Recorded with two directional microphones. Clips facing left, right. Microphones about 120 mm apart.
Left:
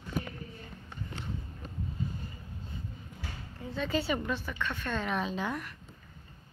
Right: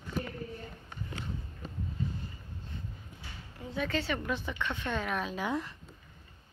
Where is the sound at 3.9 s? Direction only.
5° left (ahead or behind).